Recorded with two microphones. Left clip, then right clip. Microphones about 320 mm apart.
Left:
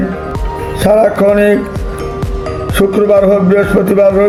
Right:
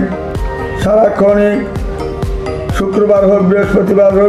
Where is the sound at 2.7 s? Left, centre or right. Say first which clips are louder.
Left 2 dB; left.